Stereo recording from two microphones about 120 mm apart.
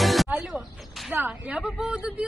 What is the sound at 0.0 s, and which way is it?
Music, centre (ahead or behind).